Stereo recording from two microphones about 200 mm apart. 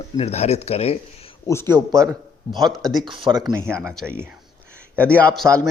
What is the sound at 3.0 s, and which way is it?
Speech, 25° right (ahead or behind).